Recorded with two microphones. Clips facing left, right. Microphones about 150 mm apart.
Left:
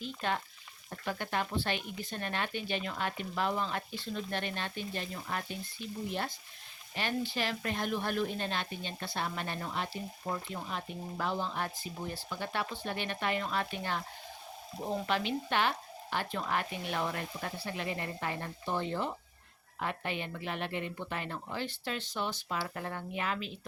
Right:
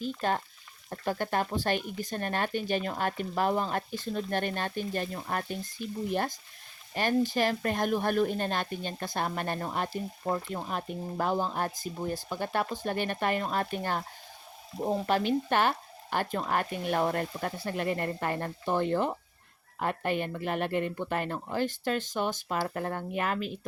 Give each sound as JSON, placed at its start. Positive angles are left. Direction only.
{"t": 0.0, "sound": "speech", "side_deg": -40}